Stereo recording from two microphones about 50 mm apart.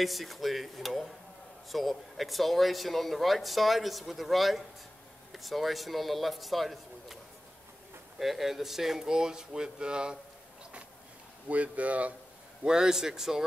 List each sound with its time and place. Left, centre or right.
0.0 s speech: centre
8.2 s speech: centre
11.4 s speech: right
12.6 s speech: centre